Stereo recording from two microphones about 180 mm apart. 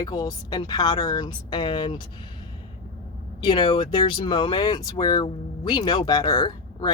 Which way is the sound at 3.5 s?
30° left (ahead or behind).